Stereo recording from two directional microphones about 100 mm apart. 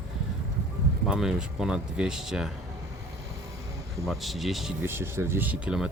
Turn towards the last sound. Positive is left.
turn(degrees=-10)  # may be behind; listen again after turning